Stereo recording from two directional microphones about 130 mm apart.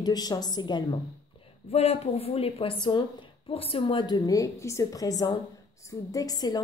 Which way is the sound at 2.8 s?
40° left (ahead or behind).